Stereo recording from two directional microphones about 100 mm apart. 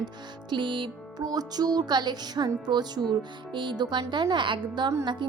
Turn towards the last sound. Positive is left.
turn(degrees=-50)  # may be behind; listen again after turning